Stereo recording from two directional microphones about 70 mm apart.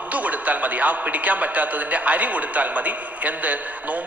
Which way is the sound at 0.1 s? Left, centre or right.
Right.